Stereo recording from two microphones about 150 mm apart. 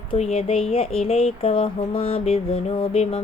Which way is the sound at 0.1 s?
45° left (ahead or behind).